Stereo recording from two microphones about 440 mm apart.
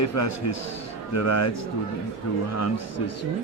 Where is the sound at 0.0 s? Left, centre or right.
Left.